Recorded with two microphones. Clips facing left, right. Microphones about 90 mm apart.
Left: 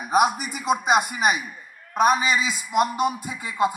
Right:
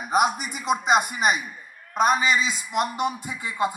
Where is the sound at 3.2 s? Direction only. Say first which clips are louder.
Left 1 dB; 20° left (ahead or behind).